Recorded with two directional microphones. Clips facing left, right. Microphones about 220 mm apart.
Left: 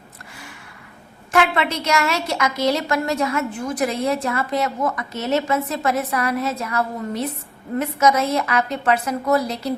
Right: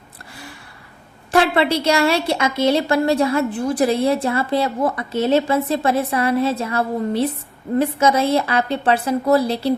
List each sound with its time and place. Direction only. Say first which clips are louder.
1.3 s a woman's voice: right 4 dB; 30° right (ahead or behind)